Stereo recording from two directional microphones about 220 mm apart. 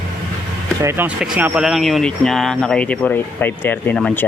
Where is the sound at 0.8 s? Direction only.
10° right (ahead or behind).